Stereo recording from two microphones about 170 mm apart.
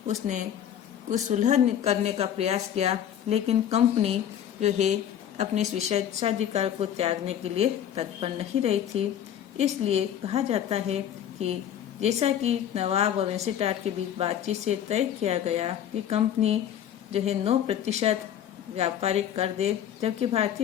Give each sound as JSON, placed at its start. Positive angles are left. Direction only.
{"t": 1.1, "sound": "a woman's voice", "side_deg": -45}